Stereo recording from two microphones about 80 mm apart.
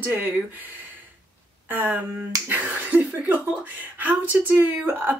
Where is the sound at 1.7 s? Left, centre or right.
Right.